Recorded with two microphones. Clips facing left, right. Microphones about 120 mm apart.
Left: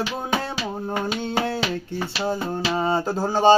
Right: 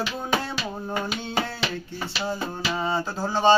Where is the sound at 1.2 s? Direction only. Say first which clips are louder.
Left 4 dB; 50° left (ahead or behind).